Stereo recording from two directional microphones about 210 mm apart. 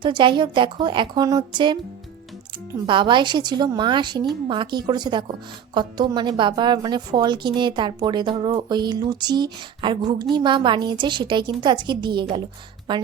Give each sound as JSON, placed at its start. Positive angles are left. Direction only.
{"t": 0.0, "sound": "a woman's voice", "side_deg": -20}
{"t": 2.8, "sound": "a woman's voice", "side_deg": -25}